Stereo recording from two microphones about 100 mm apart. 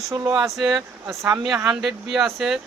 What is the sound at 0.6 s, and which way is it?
Speech, 45° right (ahead or behind).